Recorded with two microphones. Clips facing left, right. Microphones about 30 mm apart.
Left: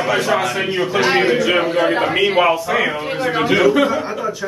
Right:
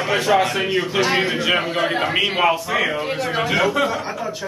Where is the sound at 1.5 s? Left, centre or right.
Centre.